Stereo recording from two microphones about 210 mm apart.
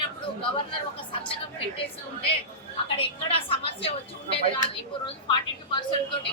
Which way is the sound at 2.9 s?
25° left (ahead or behind).